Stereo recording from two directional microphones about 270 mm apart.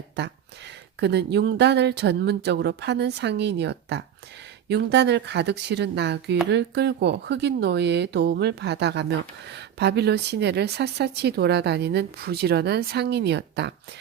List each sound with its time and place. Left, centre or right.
0.9 s speech: right